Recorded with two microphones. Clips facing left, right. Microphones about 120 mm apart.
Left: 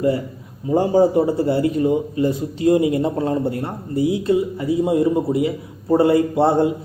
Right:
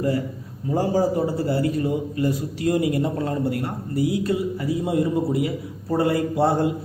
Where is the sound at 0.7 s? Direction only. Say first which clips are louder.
Left 6 dB; 20° left (ahead or behind).